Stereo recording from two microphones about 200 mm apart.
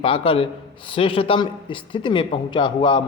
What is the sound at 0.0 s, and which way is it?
A man's voice, 25° left (ahead or behind).